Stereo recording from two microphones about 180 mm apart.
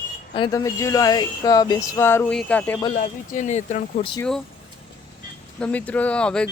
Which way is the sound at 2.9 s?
45° left (ahead or behind).